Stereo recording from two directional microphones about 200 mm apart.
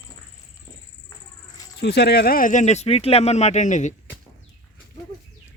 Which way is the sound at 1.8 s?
55° left (ahead or behind).